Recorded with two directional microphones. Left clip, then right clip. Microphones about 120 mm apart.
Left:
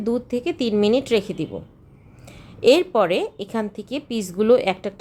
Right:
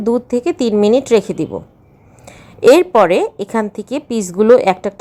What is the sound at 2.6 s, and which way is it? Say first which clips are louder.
Speech: right 8 dB; 45° right (ahead or behind).